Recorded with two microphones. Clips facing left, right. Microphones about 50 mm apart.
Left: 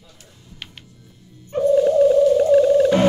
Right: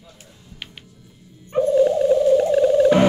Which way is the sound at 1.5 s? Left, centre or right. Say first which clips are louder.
Left 1 dB; centre.